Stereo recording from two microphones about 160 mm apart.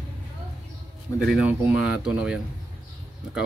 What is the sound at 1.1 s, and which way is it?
Speech, centre (ahead or behind).